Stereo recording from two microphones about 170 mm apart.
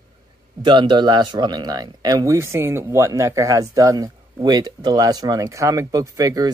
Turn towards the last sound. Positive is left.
turn(degrees=-20)  # may be behind; listen again after turning